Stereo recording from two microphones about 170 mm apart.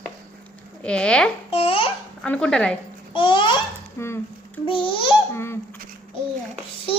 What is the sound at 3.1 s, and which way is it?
Speech, 30° left (ahead or behind).